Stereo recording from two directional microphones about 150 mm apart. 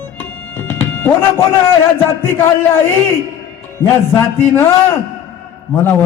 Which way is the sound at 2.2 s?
15° left (ahead or behind).